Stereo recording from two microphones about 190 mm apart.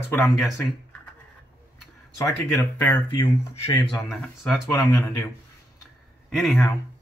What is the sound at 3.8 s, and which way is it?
Speech, 5° left (ahead or behind).